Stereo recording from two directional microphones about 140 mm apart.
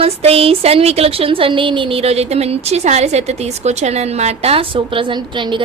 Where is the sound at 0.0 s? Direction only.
45° right (ahead or behind).